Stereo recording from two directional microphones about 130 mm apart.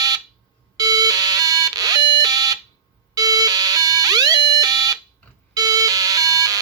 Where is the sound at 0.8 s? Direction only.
30° right (ahead or behind).